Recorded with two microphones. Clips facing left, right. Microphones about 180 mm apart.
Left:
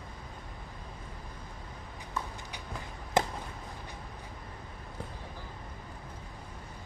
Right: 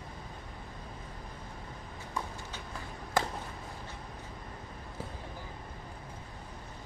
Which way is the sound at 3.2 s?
20° left (ahead or behind).